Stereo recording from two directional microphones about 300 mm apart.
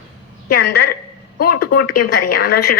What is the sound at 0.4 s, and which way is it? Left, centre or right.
A woman's voice, left.